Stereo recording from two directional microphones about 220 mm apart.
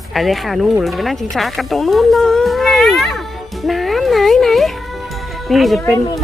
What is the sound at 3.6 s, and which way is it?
Music, centre (ahead or behind).